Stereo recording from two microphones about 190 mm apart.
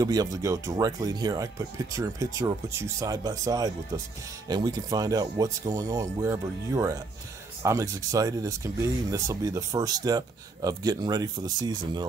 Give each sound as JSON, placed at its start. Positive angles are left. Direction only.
{"t": 0.0, "sound": "speech", "side_deg": -20}